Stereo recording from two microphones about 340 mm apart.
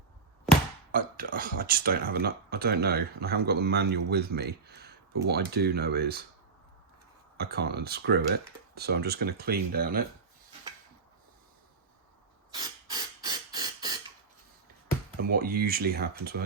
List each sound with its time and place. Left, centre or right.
0.9 s speech: right
7.3 s speech: right
12.5 s a sound: centre
15.2 s speech: right